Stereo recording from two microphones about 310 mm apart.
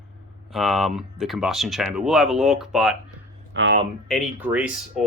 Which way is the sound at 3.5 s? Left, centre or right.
Right.